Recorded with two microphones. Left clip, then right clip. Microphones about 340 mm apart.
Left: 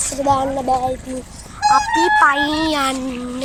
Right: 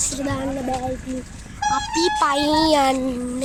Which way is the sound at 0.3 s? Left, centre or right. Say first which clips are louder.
Left 12 dB; left.